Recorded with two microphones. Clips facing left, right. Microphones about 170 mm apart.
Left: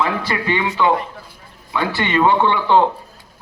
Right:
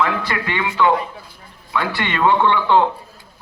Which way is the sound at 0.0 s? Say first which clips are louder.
Even; 30° left (ahead or behind).